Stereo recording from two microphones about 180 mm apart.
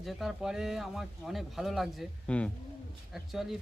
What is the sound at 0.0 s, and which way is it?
Speech, centre (ahead or behind).